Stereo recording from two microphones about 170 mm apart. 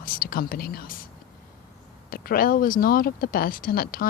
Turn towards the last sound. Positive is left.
turn(degrees=60)  # may be behind; listen again after turning